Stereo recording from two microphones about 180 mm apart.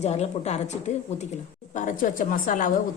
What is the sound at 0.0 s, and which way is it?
A woman's voice, 35° left (ahead or behind).